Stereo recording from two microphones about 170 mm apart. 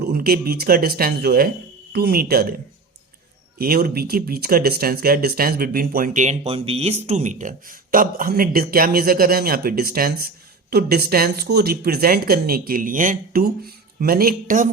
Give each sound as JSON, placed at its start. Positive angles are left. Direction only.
{"t": 0.0, "sound": "speech", "side_deg": -65}
{"t": 3.6, "sound": "speech", "side_deg": -65}